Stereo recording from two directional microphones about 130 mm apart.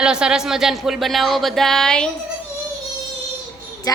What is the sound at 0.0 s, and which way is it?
Speech, 5° right (ahead or behind).